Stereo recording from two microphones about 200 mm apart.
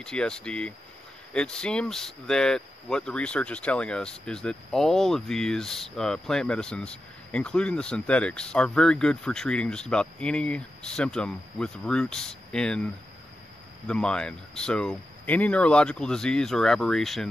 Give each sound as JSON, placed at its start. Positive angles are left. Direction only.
{"t": 0.0, "sound": "speech", "side_deg": 5}